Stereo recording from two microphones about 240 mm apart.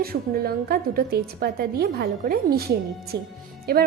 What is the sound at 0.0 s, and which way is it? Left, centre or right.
A woman's voice, right.